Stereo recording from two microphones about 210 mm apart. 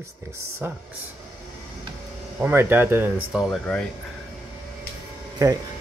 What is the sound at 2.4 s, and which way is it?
Speech, 10° right (ahead or behind).